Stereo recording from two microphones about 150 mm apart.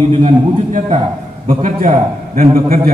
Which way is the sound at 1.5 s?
65° right (ahead or behind).